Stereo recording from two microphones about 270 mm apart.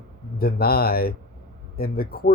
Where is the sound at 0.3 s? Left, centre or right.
Left.